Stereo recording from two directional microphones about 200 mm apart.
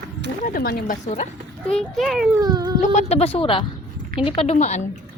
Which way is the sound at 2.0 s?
Centre (ahead or behind).